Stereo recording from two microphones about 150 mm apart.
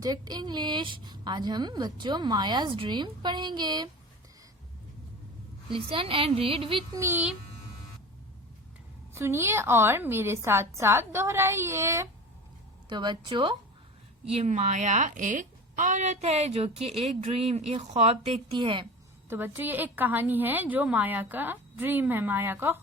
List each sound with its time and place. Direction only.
0.0 s a woman's voice: 25° right (ahead or behind)
5.7 s a woman's voice: 35° right (ahead or behind)
6.9 s a woman's voice: 15° right (ahead or behind)
9.1 s a woman's voice: 20° right (ahead or behind)
12.9 s a woman's voice: 30° right (ahead or behind)
14.3 s a woman's voice: 45° right (ahead or behind)
19.3 s a woman's voice: 15° right (ahead or behind)